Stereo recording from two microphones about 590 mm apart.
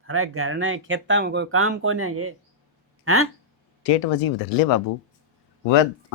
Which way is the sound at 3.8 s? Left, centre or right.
Left.